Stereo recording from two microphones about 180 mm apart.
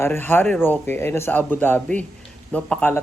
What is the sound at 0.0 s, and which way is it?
Speech, 15° left (ahead or behind).